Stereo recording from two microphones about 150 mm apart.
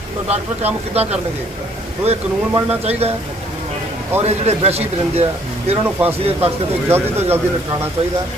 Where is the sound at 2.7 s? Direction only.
45° right (ahead or behind).